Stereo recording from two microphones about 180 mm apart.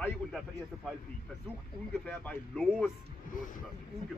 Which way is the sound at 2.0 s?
5° left (ahead or behind).